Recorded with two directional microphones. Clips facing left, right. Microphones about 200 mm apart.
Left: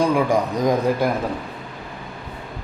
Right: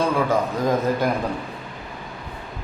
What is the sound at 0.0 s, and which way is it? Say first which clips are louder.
A man's voice: left 2 dB; 15° left (ahead or behind).